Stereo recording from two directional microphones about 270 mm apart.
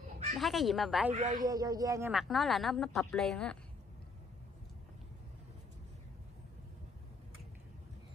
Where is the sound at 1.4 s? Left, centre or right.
Centre.